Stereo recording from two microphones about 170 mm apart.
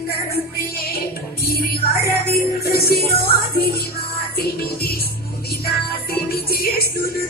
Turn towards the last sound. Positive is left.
turn(degrees=60)  # may be behind; listen again after turning